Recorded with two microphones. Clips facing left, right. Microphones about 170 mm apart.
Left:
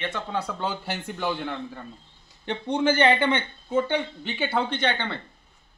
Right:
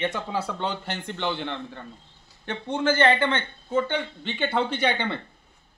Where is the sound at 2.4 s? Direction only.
15° left (ahead or behind).